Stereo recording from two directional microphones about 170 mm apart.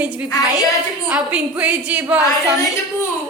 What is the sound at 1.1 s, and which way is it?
A woman's voice, 5° right (ahead or behind).